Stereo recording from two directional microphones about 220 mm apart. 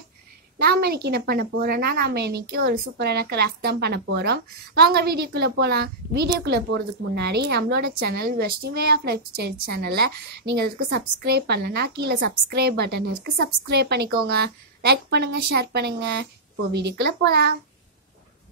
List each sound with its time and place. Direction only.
0.6 s a woman's voice: 45° right (ahead or behind)